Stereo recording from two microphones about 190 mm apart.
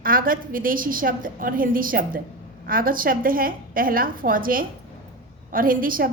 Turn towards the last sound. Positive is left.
turn(degrees=-45)  # may be behind; listen again after turning